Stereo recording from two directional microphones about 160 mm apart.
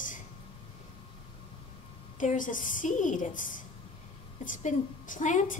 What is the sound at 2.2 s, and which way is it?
A woman's voice, 55° left (ahead or behind).